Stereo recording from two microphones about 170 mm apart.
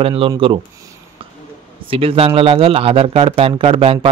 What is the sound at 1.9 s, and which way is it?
Speech, 35° right (ahead or behind).